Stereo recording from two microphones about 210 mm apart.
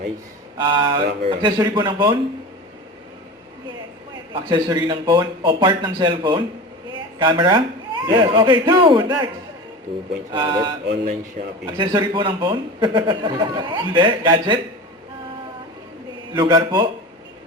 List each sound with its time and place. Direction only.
0.6 s a man's voice: 20° right (ahead or behind)
4.3 s a man's voice: 20° right (ahead or behind)
10.3 s a man's voice: 20° right (ahead or behind)
16.4 s a man's voice: 20° right (ahead or behind)